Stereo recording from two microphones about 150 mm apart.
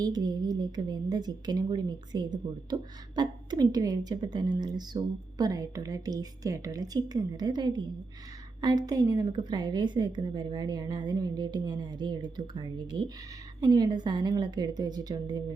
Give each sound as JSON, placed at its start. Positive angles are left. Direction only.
{"t": 0.0, "sound": "a woman's voice", "side_deg": -25}